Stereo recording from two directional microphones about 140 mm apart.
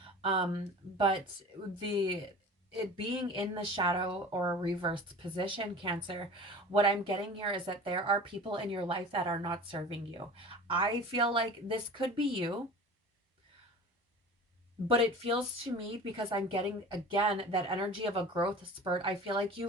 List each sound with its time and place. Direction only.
0.2 s speech: 40° right (ahead or behind)
2.7 s speech: 35° right (ahead or behind)
14.8 s speech: 40° right (ahead or behind)